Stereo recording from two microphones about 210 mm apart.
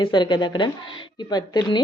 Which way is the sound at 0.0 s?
20° left (ahead or behind).